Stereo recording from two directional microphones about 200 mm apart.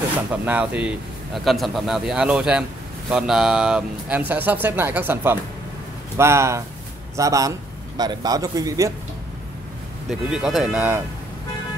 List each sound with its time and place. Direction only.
0.3 s a man's voice: 5° right (ahead or behind)
10.0 s a man's voice: centre (ahead or behind)